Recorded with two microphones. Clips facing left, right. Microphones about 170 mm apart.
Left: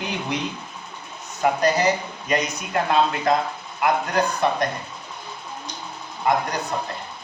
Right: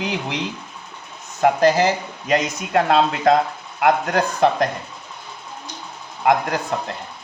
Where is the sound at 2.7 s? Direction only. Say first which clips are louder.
Right 3 dB; 75° right (ahead or behind).